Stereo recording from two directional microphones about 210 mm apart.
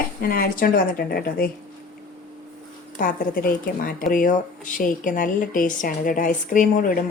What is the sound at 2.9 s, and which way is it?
Speech, 40° left (ahead or behind).